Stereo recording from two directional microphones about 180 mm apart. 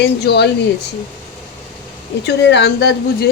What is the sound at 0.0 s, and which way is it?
Speech, 70° left (ahead or behind).